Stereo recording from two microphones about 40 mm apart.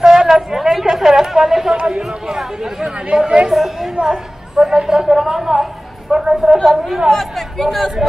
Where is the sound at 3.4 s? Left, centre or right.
Centre.